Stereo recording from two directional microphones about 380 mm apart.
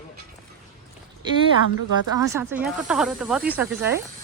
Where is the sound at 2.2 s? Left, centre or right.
Centre.